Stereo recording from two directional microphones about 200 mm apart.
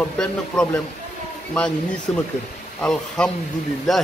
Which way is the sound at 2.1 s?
5° left (ahead or behind).